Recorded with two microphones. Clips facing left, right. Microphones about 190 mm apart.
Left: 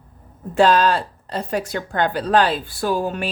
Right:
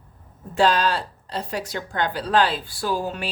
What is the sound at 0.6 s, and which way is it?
Speech, 50° left (ahead or behind).